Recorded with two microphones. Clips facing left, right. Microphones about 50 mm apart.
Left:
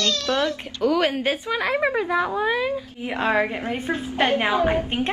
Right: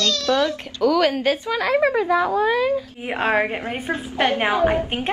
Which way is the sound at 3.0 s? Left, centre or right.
Right.